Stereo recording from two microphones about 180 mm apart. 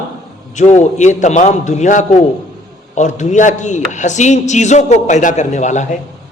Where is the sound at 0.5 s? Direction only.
40° left (ahead or behind).